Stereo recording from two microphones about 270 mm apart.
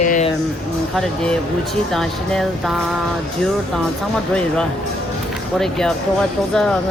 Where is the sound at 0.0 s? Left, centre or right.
Left.